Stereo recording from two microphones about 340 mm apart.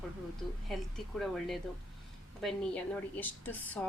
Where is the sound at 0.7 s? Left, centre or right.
Centre.